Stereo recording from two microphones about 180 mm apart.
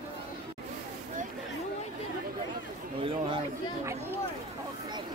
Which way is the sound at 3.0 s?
30° right (ahead or behind).